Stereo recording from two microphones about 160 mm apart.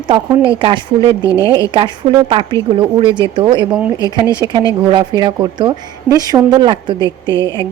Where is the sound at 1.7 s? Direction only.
30° right (ahead or behind).